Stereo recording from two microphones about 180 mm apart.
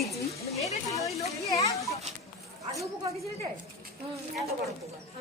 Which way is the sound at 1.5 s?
20° left (ahead or behind).